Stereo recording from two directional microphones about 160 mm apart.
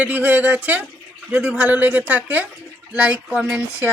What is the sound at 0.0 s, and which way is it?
Speech, 10° right (ahead or behind).